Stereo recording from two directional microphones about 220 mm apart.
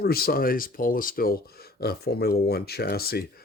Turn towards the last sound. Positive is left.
turn(degrees=45)  # may be behind; listen again after turning